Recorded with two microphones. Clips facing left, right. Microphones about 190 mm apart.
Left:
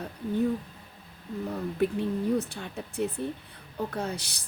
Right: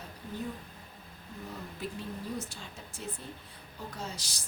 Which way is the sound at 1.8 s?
60° left (ahead or behind).